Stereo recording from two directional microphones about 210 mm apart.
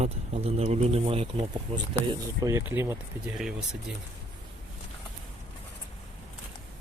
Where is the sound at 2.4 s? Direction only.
15° right (ahead or behind).